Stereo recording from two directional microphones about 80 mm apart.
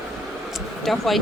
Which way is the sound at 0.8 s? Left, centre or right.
Centre.